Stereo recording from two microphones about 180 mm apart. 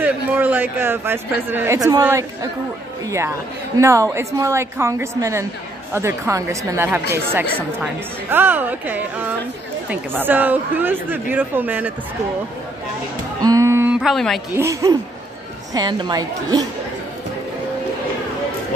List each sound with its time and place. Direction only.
0.0 s a woman's voice: 10° right (ahead or behind)
13.4 s music: 20° right (ahead or behind); by 14.4 s centre (ahead or behind)
14.5 s a woman's voice: 15° right (ahead or behind)